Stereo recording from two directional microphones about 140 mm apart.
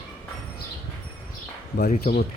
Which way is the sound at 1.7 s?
85° left.